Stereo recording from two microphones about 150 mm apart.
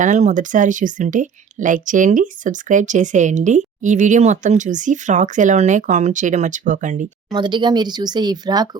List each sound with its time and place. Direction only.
0.0 s speech: 55° right (ahead or behind)
7.3 s speech: 30° right (ahead or behind)